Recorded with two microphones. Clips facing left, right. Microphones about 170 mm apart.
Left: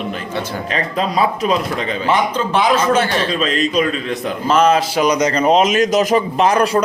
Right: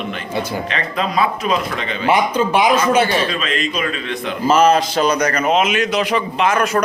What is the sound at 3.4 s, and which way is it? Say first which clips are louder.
Speech: left 5 dB; 40° left (ahead or behind).